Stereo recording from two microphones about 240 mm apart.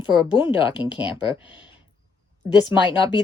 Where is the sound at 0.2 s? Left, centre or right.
Left.